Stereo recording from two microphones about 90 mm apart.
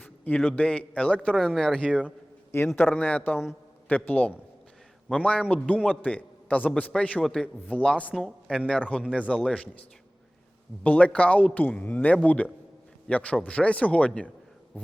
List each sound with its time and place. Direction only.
0.0 s a man's voice: 15° left (ahead or behind)
10.8 s a man's voice: 15° left (ahead or behind)